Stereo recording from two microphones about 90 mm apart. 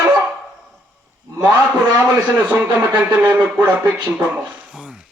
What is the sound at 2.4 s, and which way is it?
A man's voice, 25° right (ahead or behind).